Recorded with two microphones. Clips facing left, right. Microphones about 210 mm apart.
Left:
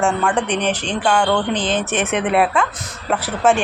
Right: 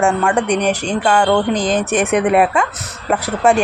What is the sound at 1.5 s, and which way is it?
Speech, 40° right (ahead or behind).